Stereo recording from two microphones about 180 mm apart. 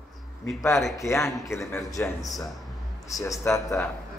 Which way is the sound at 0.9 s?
15° left (ahead or behind).